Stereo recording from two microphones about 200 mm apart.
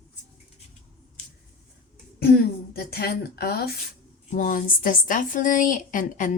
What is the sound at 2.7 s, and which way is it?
Speech, 50° left (ahead or behind).